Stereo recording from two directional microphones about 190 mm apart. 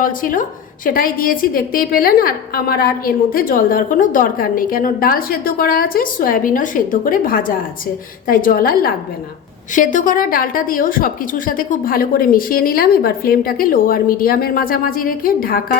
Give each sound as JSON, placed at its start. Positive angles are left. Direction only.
{"t": 0.0, "sound": "a woman's voice", "side_deg": 45}